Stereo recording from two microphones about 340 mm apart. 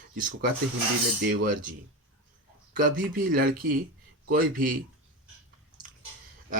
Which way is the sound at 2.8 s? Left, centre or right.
Right.